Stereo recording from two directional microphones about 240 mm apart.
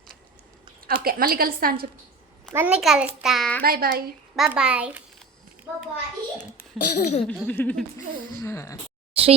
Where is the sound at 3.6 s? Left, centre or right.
Right.